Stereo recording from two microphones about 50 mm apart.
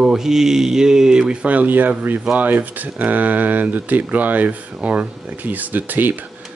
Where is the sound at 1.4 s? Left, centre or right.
Right.